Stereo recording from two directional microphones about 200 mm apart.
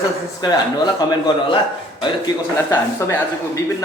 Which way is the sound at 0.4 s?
20° left (ahead or behind).